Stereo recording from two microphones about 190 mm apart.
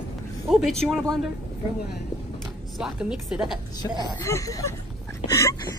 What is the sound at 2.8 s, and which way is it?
Speech, 5° right (ahead or behind).